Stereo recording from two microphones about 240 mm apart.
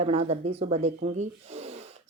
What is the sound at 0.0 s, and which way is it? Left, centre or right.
Speech, right.